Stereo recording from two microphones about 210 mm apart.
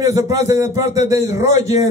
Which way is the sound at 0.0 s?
15° right (ahead or behind).